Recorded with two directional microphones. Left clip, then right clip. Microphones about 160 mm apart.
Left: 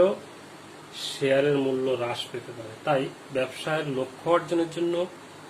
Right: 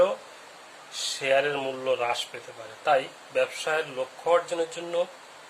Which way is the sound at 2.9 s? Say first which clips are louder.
Right 2 dB; 25° right (ahead or behind).